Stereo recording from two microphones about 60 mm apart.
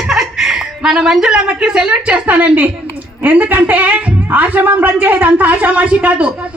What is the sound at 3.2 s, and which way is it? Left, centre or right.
A woman's voice, right.